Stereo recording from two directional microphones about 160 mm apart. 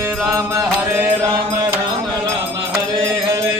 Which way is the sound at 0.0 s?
15° right (ahead or behind).